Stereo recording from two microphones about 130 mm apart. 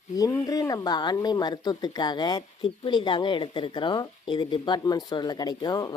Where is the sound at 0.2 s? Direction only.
25° left (ahead or behind).